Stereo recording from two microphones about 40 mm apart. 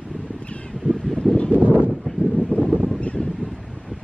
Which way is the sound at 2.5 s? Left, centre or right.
Left.